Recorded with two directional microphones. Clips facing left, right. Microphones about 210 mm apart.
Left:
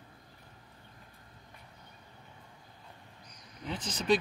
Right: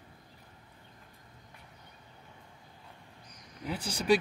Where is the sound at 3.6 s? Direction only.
10° right (ahead or behind).